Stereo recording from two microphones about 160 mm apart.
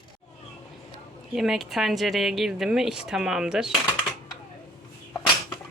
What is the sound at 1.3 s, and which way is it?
A woman's voice, centre (ahead or behind).